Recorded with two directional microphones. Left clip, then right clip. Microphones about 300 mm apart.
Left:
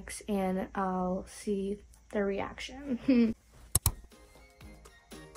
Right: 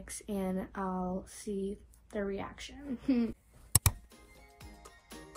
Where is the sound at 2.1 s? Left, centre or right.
Left.